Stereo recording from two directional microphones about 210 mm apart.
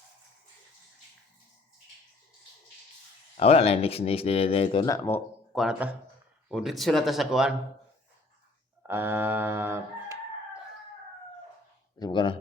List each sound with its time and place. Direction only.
3.3 s speech: 30° left (ahead or behind)
5.5 s speech: 5° right (ahead or behind)
8.9 s crowing: 10° right (ahead or behind)
11.9 s speech: 20° left (ahead or behind)